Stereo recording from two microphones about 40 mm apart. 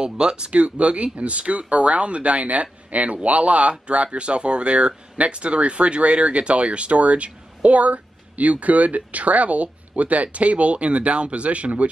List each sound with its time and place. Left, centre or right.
0.0 s speech: right